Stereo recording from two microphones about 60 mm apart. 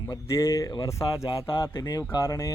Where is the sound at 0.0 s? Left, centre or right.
Left.